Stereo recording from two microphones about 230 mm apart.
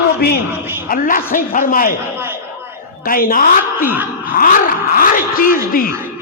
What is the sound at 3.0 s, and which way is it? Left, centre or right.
A man's voice, left.